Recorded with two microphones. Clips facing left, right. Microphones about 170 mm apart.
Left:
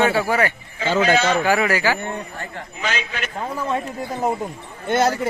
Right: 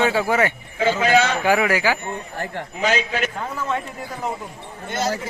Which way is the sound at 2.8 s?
40° right (ahead or behind).